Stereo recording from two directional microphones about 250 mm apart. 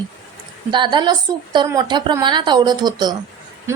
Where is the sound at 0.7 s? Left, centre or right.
Centre.